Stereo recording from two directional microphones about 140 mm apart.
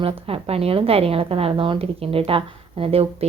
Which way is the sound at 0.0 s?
45° right (ahead or behind).